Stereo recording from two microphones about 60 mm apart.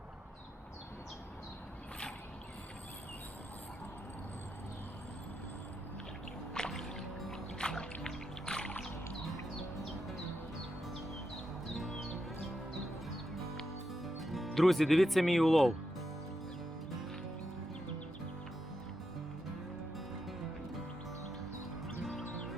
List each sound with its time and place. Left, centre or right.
6.5 s music: centre
11.7 s music: centre
13.3 s music: centre